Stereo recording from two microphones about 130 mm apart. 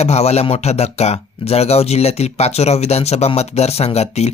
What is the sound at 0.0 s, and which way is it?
Speech, 55° left (ahead or behind).